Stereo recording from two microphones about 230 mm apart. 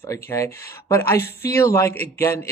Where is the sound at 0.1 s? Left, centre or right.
Centre.